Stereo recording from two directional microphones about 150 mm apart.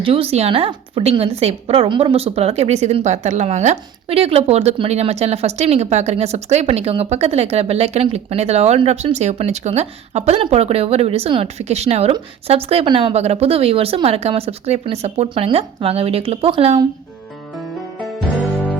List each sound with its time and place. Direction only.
0.0 s a woman's voice: 40° right (ahead or behind)